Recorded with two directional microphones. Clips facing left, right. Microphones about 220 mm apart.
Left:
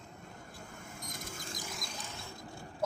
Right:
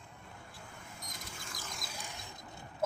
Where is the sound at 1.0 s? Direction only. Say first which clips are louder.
Left 6 dB; 50° left (ahead or behind).